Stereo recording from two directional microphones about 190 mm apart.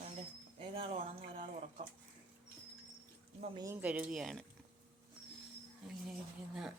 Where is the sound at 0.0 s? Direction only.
30° right (ahead or behind).